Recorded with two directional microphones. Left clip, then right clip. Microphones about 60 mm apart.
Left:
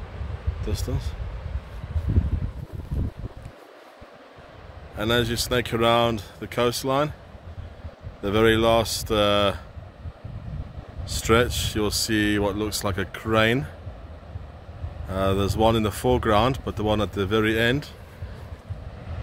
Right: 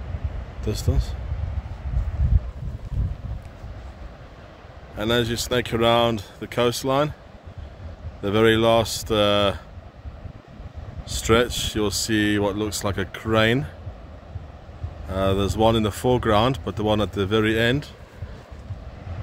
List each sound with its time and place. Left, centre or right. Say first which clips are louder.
4.9 s speech: right 1 dB; centre
6.0 s speech: right 2 dB; right
8.2 s speech: right 1 dB; centre
11.1 s speech: right 1 dB; centre
15.0 s speech: right 1 dB; centre
16.6 s speech: right 2 dB; right
17.5 s speech: right 1 dB; centre